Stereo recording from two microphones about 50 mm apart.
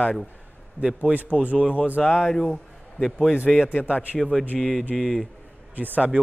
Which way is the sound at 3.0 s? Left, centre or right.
Centre.